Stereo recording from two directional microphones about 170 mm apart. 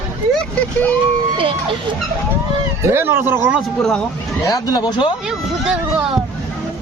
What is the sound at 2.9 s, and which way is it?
Speech, 15° right (ahead or behind).